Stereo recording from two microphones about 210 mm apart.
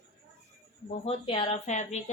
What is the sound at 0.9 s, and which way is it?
Speech, 25° left (ahead or behind).